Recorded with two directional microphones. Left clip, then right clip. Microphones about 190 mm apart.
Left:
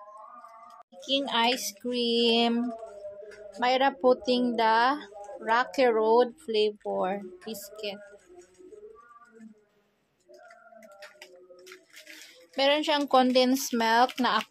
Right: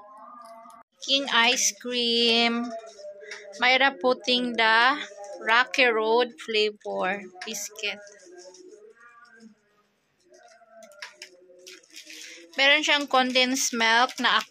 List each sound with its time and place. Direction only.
1.0 s a woman's voice: 15° left (ahead or behind)
12.5 s a woman's voice: 25° left (ahead or behind)